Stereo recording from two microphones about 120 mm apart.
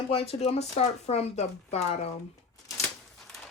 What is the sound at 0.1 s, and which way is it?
Speech, 55° left (ahead or behind).